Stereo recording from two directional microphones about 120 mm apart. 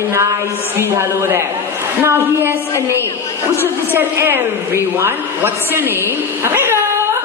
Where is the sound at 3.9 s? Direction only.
20° right (ahead or behind).